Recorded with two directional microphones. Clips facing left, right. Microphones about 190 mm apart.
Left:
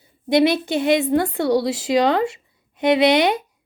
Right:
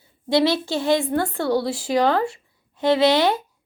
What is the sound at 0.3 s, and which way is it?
A woman's voice, 20° left (ahead or behind).